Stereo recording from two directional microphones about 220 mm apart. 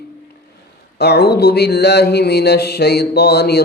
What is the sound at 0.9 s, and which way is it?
Mantra, 45° left (ahead or behind).